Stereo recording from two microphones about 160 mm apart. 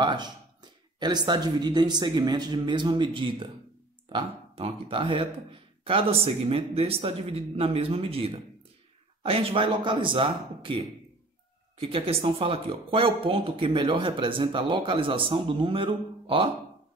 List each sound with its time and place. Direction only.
0.0 s speech: 25° right (ahead or behind)